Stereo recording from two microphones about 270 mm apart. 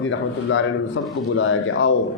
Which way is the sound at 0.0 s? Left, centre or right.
Left.